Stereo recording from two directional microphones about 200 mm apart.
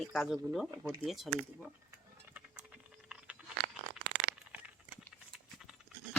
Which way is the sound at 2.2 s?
10° right (ahead or behind).